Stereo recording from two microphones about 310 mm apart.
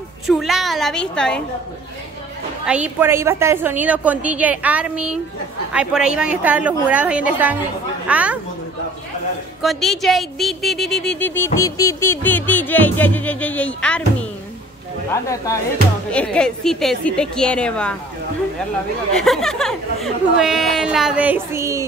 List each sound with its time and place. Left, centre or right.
0.3 s speech: centre
2.6 s speech: centre
9.6 s speech: centre
16.1 s speech: centre
19.1 s speech: centre